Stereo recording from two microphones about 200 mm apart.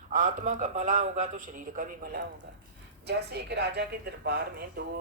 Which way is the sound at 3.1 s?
55° right (ahead or behind).